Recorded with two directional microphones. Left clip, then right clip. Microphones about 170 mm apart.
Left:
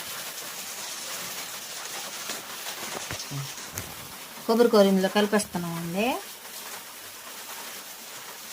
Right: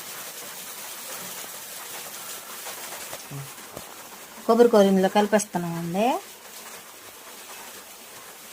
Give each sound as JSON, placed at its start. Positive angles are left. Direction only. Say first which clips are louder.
{"t": 4.4, "sound": "speech", "louder": "right 3 dB", "side_deg": -20}